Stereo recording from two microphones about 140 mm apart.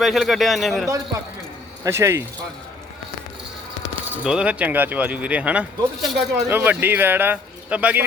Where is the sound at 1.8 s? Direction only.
20° right (ahead or behind).